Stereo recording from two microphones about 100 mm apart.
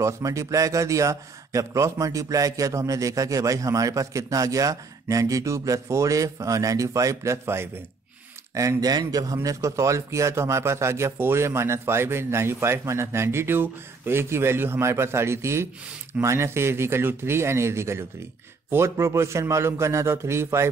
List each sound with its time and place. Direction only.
0.0 s speech: 35° right (ahead or behind)
8.5 s a man's voice: 35° right (ahead or behind)